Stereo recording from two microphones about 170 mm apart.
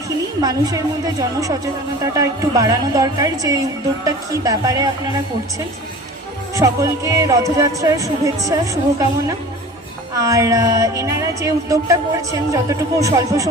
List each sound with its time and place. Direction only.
0.4 s music: 20° right (ahead or behind)
6.6 s music: 20° right (ahead or behind)
10.2 s music: 20° right (ahead or behind)